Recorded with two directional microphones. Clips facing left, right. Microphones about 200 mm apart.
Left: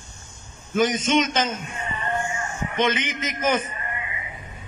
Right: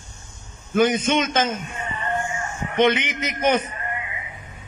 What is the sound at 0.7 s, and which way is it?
Speech, 55° right (ahead or behind).